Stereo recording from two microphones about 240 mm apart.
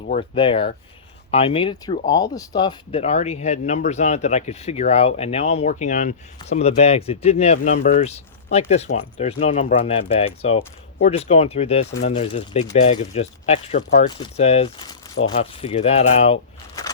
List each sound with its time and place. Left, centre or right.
0.1 s speech: left